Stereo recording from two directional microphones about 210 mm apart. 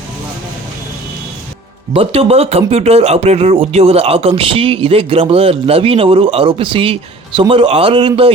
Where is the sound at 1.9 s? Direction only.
25° right (ahead or behind).